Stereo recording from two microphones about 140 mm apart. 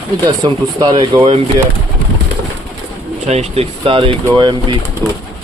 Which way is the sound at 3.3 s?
45° right (ahead or behind).